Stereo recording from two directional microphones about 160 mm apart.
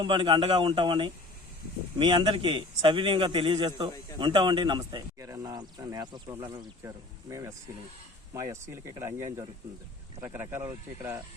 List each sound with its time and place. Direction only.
0.0 s speech: 30° right (ahead or behind)
6.3 s speech: 15° right (ahead or behind)